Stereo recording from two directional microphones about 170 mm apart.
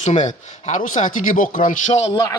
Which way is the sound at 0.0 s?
40° left (ahead or behind).